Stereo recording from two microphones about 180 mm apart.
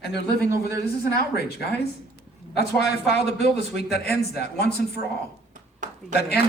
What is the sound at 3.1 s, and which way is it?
A man's voice, 65° left (ahead or behind).